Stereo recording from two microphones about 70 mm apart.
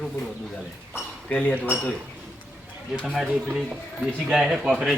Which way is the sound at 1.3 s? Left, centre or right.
Centre.